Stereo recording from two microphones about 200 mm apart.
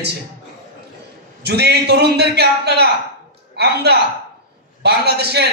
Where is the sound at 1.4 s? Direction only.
55° right (ahead or behind).